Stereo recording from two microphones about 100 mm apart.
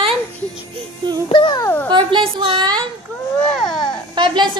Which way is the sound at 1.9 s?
55° right (ahead or behind).